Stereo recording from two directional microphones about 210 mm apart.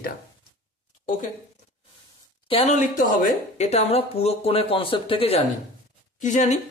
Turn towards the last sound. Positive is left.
turn(degrees=35)  # may be behind; listen again after turning